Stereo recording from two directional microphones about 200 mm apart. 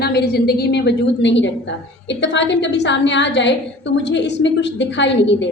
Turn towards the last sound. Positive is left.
turn(degrees=65)  # may be behind; listen again after turning